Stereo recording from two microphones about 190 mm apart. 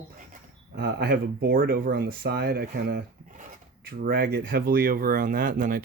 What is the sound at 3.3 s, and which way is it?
Speech, 40° right (ahead or behind).